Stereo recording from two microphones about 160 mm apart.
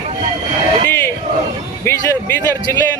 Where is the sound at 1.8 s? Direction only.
15° left (ahead or behind).